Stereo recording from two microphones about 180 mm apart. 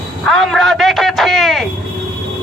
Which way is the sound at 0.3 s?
Centre (ahead or behind).